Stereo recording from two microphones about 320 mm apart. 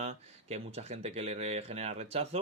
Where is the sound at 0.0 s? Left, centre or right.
Centre.